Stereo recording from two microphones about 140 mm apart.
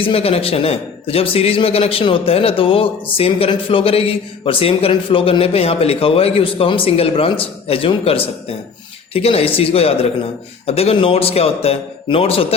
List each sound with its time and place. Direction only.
0.0 s a man's voice: 45° left (ahead or behind)